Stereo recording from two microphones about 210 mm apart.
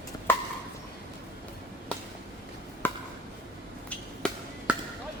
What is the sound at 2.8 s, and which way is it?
Chop, 10° left (ahead or behind).